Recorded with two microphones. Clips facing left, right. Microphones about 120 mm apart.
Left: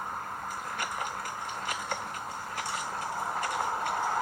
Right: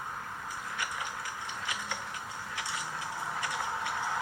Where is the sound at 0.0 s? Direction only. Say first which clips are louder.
Left 4 dB; 45° left (ahead or behind).